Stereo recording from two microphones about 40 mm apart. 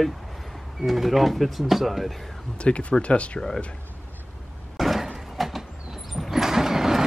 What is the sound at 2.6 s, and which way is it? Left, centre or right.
Speech, left.